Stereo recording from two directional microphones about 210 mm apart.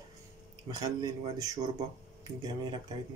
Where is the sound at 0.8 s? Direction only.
20° right (ahead or behind).